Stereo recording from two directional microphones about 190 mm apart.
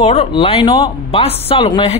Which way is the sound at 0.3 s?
25° left (ahead or behind).